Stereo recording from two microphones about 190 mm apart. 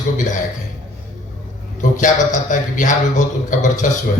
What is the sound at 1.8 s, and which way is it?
A man's voice, 40° left (ahead or behind).